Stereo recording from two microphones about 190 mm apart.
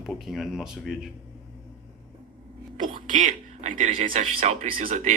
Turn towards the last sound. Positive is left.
turn(degrees=-35)  # may be behind; listen again after turning